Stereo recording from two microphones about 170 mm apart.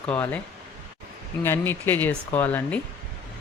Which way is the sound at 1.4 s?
15° left (ahead or behind).